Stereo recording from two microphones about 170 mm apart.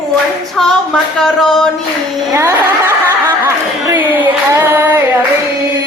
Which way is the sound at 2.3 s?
15° right (ahead or behind).